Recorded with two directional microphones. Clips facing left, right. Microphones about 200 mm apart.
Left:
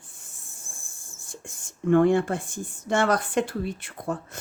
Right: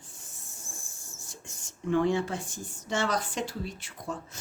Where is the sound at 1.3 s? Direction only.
55° left (ahead or behind).